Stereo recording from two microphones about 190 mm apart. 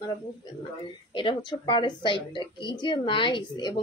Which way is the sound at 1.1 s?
25° left (ahead or behind).